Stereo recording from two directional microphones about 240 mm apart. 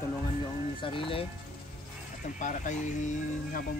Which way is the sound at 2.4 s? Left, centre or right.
Left.